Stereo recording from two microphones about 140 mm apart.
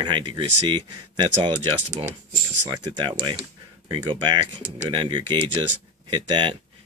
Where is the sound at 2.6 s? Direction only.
30° right (ahead or behind).